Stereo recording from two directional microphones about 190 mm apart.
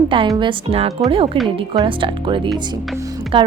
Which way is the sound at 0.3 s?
30° right (ahead or behind).